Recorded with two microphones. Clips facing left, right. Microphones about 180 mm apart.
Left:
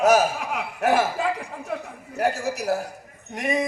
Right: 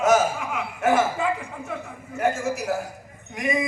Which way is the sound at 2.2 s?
35° left (ahead or behind).